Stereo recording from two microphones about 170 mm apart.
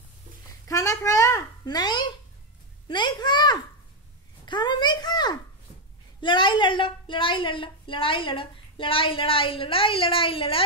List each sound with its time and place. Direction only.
0.7 s a child's voice: 20° left (ahead or behind)